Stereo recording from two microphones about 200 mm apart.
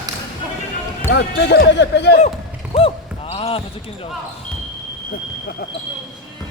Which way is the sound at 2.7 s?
30° left (ahead or behind).